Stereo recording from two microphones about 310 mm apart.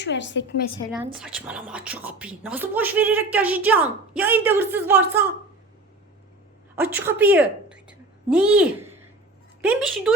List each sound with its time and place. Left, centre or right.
0.0 s a woman's voice: left
0.9 s a woman's voice: centre
6.7 s a woman's voice: centre